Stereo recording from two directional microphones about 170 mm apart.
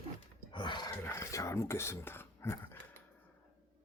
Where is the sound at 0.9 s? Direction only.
15° left (ahead or behind).